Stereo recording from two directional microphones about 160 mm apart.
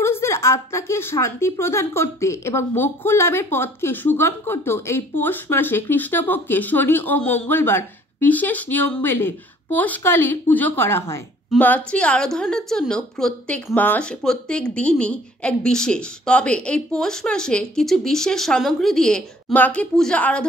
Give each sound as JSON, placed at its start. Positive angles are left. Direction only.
{"t": 0.0, "sound": "speech", "side_deg": 15}